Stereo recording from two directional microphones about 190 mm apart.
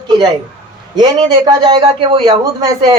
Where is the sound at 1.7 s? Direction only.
25° right (ahead or behind).